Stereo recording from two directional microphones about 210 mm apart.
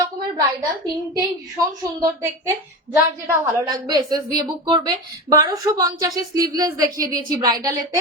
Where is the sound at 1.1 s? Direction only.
15° right (ahead or behind).